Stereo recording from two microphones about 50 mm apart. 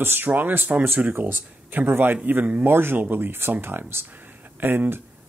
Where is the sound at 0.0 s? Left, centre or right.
Right.